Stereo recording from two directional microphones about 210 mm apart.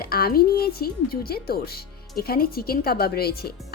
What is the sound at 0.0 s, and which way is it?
Speech, 45° left (ahead or behind).